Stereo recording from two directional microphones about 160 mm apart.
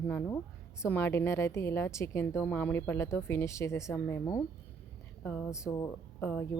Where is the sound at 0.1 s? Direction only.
10° left (ahead or behind).